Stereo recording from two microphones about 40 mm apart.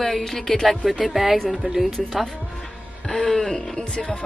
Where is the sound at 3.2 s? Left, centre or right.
Centre.